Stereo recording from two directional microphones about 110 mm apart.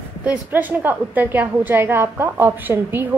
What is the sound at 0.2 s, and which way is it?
A woman's voice, 15° right (ahead or behind).